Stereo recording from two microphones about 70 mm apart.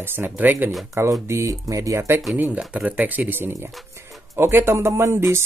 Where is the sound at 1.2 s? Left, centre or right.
Right.